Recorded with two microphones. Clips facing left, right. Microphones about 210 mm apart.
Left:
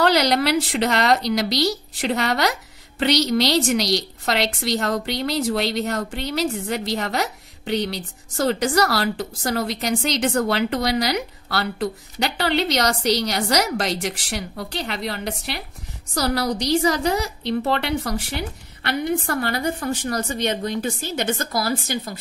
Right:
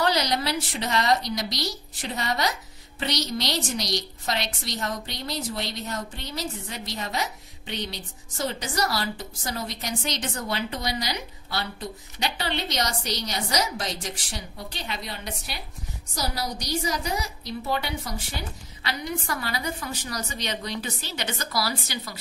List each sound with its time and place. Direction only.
0.0 s a woman's voice: 75° left (ahead or behind); by 22.2 s 50° left (ahead or behind)